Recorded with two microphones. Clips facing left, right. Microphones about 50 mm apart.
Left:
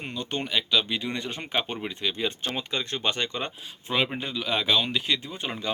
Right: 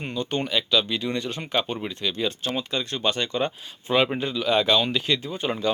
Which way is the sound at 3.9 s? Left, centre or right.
Centre.